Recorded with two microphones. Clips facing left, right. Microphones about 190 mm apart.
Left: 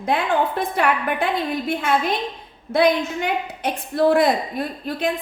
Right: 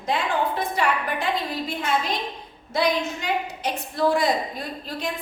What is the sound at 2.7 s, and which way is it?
A woman's voice, 55° left (ahead or behind).